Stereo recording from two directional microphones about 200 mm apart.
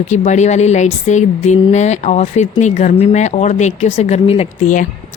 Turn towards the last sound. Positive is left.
turn(degrees=40)  # may be behind; listen again after turning